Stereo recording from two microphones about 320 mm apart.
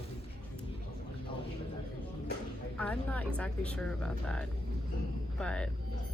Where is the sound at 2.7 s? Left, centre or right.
Centre.